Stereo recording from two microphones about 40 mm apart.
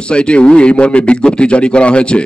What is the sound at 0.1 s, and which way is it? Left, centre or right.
Speech, left.